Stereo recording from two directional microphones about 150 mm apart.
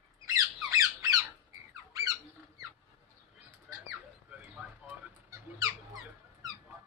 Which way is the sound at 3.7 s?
5° right (ahead or behind).